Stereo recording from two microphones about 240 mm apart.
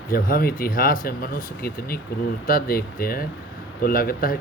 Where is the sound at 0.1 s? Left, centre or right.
Left.